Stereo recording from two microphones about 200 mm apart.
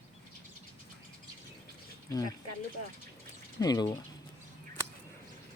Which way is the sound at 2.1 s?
20° left (ahead or behind).